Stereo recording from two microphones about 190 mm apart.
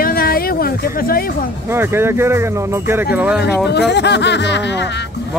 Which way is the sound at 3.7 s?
65° left (ahead or behind).